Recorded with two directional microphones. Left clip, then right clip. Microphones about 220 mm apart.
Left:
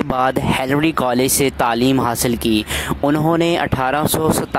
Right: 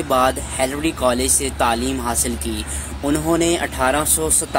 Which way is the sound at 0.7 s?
45° left (ahead or behind).